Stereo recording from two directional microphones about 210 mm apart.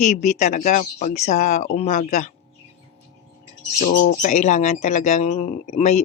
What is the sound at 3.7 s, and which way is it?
Speech, 40° left (ahead or behind).